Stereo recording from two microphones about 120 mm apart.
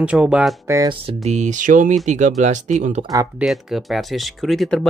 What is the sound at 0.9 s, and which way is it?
Speech, 60° right (ahead or behind).